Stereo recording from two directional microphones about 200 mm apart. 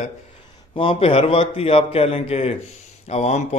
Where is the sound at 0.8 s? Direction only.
30° left (ahead or behind).